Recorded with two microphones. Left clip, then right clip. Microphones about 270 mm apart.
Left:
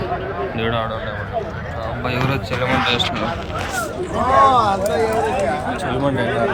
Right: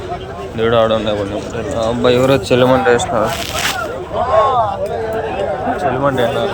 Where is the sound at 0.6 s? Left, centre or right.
Right.